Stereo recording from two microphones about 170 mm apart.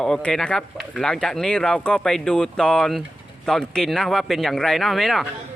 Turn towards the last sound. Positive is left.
turn(degrees=0)  # may be behind; listen again after turning